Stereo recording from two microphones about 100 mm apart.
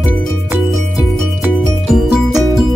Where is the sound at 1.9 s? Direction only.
5° right (ahead or behind).